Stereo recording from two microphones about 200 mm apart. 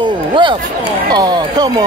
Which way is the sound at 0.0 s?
25° right (ahead or behind).